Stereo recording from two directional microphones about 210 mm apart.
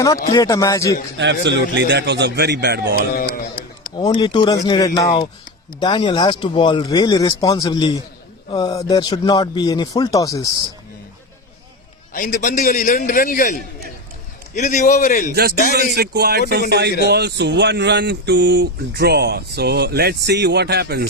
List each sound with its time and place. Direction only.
0.3 s speech: 15° left (ahead or behind)
1.2 s speech: 55° right (ahead or behind)
3.1 s speech: 45° left (ahead or behind)
3.9 s speech: 20° left (ahead or behind)
12.1 s a man's voice: 40° left (ahead or behind)
15.3 s speech: 45° right (ahead or behind)